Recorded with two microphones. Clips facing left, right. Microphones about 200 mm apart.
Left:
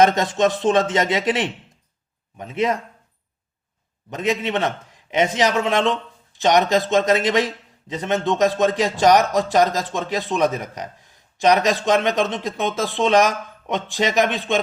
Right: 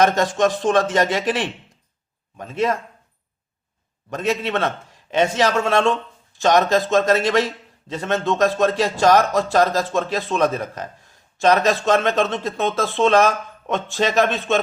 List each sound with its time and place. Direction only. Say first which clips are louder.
0.0 s a man's voice: left 1 dB; 20° left (ahead or behind)
4.1 s a man's voice: even; 15° left (ahead or behind)